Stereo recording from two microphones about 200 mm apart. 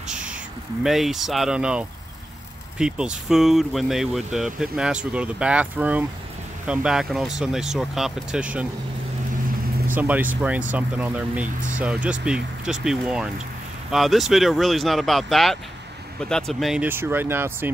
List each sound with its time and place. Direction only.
0.0 s a sound: 5° right (ahead or behind)
0.8 s speech: centre (ahead or behind)
9.9 s speech: 10° right (ahead or behind)